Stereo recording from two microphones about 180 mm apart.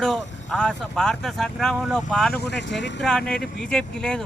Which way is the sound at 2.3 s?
70° left (ahead or behind).